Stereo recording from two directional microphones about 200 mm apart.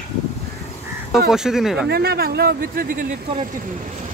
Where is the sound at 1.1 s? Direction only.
Centre (ahead or behind).